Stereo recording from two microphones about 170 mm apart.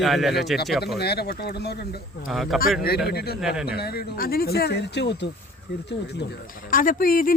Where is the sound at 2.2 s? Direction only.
Centre (ahead or behind).